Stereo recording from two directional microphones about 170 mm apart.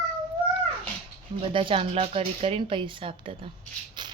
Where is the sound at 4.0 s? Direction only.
25° right (ahead or behind).